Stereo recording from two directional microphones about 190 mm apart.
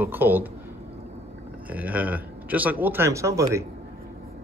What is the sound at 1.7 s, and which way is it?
Speech, 10° right (ahead or behind).